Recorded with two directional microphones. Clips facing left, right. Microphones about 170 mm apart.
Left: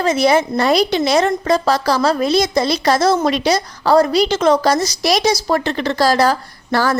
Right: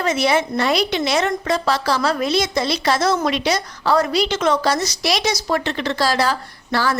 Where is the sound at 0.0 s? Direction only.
35° left (ahead or behind).